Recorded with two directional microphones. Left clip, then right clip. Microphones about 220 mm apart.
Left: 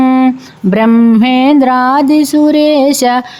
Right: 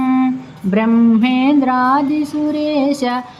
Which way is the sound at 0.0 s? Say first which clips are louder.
Left 7 dB; 50° left (ahead or behind).